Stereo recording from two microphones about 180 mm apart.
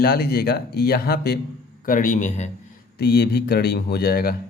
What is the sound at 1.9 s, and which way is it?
Speech, 45° left (ahead or behind).